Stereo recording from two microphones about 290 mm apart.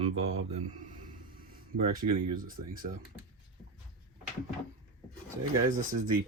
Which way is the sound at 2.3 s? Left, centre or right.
Right.